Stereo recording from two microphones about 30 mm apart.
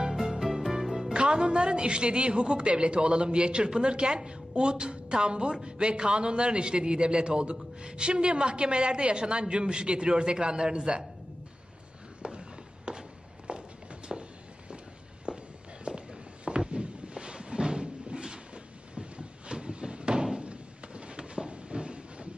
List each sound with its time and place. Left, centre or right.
0.1 s music: centre
1.1 s a woman's voice: right
12.2 s a sound: right
13.5 s walk: right
14.1 s walk: centre
15.3 s walk: right
16.4 s a sound: right